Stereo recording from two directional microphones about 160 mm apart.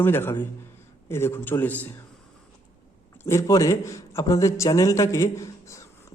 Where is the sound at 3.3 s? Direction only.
20° left (ahead or behind).